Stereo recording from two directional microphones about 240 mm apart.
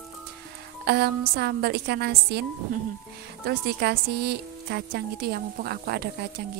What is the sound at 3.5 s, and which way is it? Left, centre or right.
A woman's voice, right.